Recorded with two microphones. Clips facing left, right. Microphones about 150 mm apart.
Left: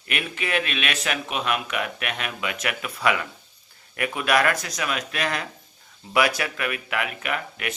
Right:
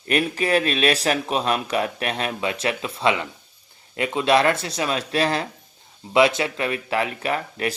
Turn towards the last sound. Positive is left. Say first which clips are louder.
# right 5 dB
turn(degrees=-30)  # may be behind; listen again after turning